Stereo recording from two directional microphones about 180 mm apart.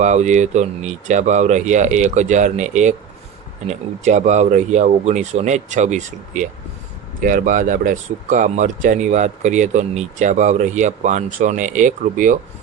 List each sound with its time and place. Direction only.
0.0 s speech: 40° right (ahead or behind)